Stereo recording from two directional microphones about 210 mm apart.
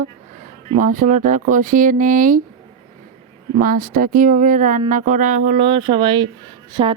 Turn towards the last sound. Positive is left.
turn(degrees=-20)  # may be behind; listen again after turning